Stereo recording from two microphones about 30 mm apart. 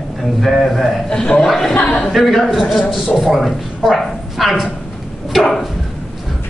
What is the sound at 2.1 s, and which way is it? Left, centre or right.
Speech, centre.